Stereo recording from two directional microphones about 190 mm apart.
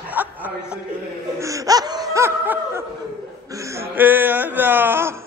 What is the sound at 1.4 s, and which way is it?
Laughter, 15° right (ahead or behind).